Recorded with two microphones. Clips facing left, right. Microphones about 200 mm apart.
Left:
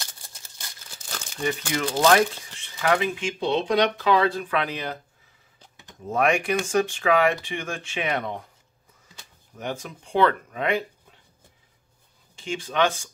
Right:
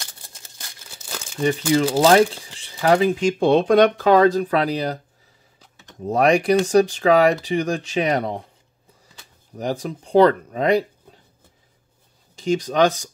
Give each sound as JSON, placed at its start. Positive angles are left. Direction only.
{"t": 1.0, "sound": "crumpling", "side_deg": -25}
{"t": 1.3, "sound": "speech", "side_deg": -30}
{"t": 9.6, "sound": "speech", "side_deg": -35}
{"t": 12.4, "sound": "speech", "side_deg": -40}